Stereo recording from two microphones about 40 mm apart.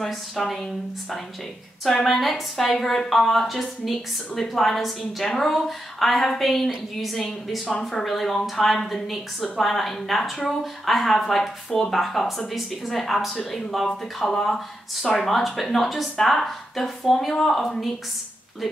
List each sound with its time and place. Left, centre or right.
0.0 s a woman's voice: centre
2.0 s a woman's voice: centre